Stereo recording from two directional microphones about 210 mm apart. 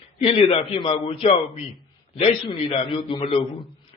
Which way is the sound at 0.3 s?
30° left (ahead or behind).